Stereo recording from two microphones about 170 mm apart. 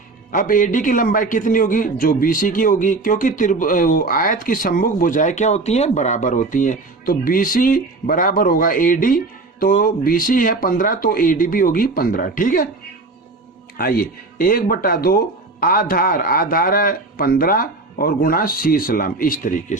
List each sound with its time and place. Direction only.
0.3 s a man's voice: 55° left (ahead or behind)
13.7 s a man's voice: 60° left (ahead or behind)